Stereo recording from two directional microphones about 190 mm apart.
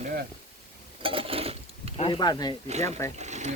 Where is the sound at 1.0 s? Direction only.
30° right (ahead or behind).